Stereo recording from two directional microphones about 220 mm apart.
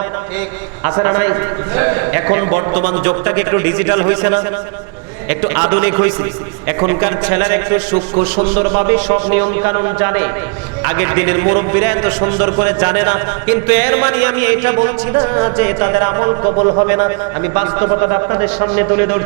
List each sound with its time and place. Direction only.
0.9 s a man's voice: 20° right (ahead or behind)
8.5 s music: 25° right (ahead or behind)
9.0 s a man's voice: 10° right (ahead or behind)
13.7 s music: 10° right (ahead or behind)